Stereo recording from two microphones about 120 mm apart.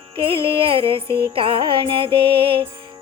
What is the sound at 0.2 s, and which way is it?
Music, 50° right (ahead or behind).